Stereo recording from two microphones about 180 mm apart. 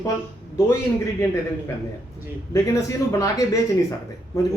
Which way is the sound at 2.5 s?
20° left (ahead or behind).